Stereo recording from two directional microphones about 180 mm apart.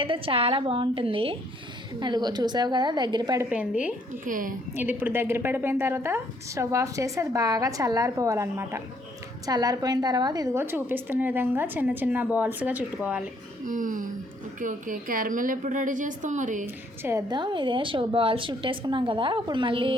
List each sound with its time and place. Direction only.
0.0 s a woman's voice: 30° right (ahead or behind)
3.5 s a woman's voice: 10° right (ahead or behind)
4.3 s a woman's voice: 50° right (ahead or behind)
4.7 s a woman's voice: 10° right (ahead or behind)
13.7 s a woman's voice: 45° right (ahead or behind)
16.6 s a woman's voice: 15° right (ahead or behind)